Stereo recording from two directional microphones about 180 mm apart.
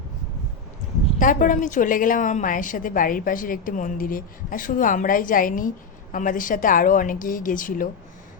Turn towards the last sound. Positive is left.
turn(degrees=50)  # may be behind; listen again after turning